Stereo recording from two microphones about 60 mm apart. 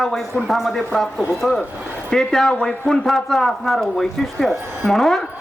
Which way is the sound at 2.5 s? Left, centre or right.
Centre.